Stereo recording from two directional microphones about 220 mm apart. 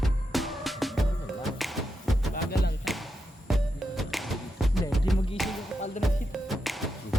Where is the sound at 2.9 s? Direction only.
Centre (ahead or behind).